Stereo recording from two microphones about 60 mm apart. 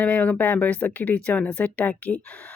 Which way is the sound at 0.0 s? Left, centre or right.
Left.